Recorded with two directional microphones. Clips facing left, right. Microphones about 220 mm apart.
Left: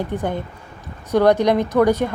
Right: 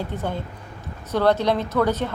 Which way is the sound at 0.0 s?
15° left (ahead or behind).